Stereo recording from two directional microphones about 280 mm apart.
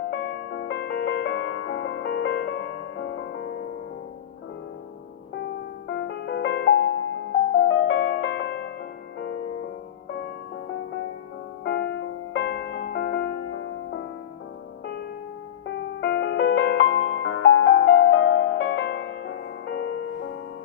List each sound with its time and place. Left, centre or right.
0.1 s music: left
5.9 s music: left
11.6 s music: left
16.0 s music: left